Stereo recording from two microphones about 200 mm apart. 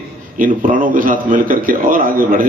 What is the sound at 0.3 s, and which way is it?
A man's voice, 40° right (ahead or behind).